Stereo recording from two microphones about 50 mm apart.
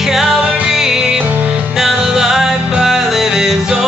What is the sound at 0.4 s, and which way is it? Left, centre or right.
Music, right.